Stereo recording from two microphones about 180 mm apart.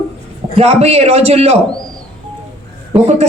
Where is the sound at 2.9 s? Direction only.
35° right (ahead or behind).